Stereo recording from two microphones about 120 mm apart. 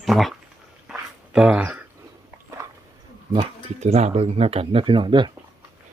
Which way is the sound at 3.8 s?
65° right (ahead or behind).